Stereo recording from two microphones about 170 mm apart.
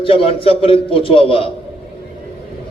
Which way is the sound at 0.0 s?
30° left (ahead or behind).